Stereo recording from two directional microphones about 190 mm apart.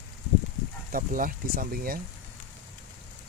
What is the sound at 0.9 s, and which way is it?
Speech, 45° right (ahead or behind).